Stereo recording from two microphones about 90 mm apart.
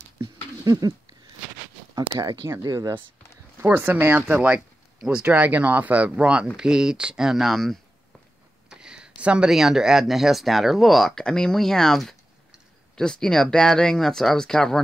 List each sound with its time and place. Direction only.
0.2 s patter: 50° right (ahead or behind)
2.0 s speech: 45° right (ahead or behind)
3.6 s speech: 20° right (ahead or behind); by 7.8 s centre (ahead or behind)
8.6 s speech: 10° right (ahead or behind)